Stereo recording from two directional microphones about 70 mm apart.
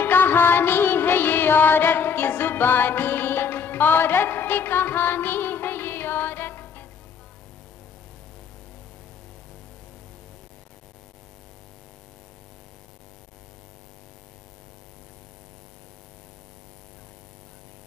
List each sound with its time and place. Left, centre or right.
0.0 s music: left